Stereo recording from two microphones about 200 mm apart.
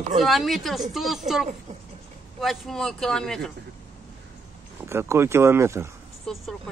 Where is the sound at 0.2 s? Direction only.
Centre (ahead or behind).